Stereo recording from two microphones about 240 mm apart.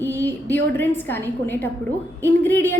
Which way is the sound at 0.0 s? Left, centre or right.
Centre.